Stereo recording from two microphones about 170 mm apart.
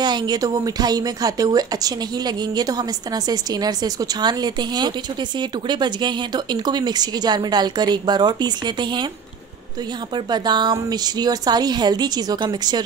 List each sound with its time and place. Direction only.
0.0 s a woman's voice: 25° right (ahead or behind)
10.1 s a woman's voice: 25° right (ahead or behind)